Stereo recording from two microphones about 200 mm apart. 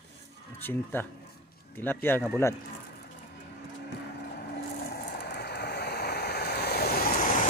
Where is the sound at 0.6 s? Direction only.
10° left (ahead or behind).